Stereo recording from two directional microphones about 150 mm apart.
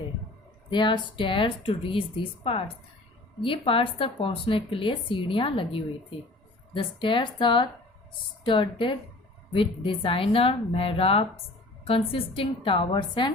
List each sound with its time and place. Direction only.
0.7 s a woman's voice: 30° left (ahead or behind)